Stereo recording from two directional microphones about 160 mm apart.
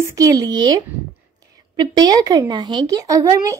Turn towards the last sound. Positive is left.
turn(degrees=-20)  # may be behind; listen again after turning